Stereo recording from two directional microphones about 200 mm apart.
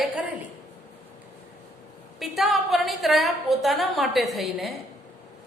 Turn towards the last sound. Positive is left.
turn(degrees=0)  # may be behind; listen again after turning